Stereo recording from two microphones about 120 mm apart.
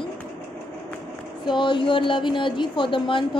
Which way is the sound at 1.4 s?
40° left (ahead or behind).